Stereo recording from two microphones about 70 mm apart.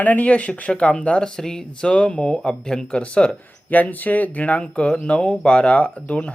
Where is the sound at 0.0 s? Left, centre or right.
Left.